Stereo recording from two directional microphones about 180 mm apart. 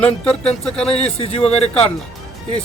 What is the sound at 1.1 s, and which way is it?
Speech, 35° left (ahead or behind).